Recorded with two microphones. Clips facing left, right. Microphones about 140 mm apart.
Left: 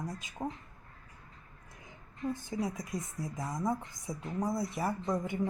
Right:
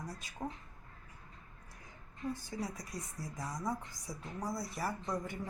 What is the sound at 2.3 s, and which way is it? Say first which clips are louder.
A woman's voice: left 6 dB; 20° left (ahead or behind).